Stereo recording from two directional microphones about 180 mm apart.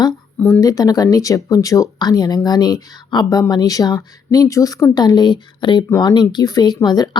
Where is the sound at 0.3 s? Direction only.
10° left (ahead or behind).